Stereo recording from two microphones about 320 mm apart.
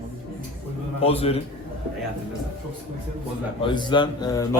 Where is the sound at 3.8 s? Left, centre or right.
Centre.